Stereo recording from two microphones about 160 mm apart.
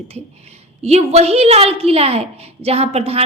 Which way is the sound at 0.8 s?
40° right (ahead or behind).